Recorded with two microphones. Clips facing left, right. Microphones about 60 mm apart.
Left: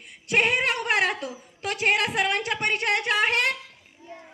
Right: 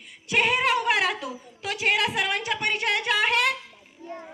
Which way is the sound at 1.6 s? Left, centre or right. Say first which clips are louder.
Left 1 dB; left.